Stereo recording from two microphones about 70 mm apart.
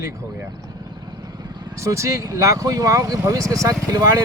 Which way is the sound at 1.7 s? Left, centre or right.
Right.